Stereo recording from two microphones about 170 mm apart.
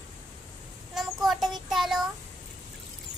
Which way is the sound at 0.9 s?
Centre (ahead or behind).